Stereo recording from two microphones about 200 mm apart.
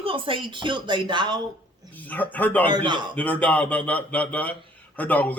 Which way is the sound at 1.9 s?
10° left (ahead or behind).